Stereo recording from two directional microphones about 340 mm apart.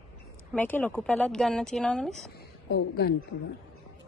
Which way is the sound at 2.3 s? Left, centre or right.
Left.